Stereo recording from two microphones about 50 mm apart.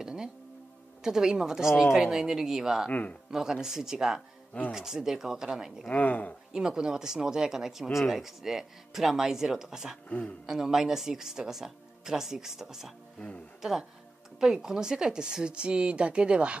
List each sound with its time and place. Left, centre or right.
0.0 s music: centre
1.0 s speech: centre
2.9 s speech: left
3.3 s speech: centre
5.9 s speech: left
6.5 s speech: centre
10.0 s speech: left
10.4 s a woman's voice: centre